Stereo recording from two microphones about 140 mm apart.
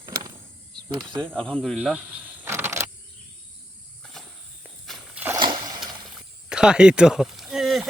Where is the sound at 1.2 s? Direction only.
5° left (ahead or behind).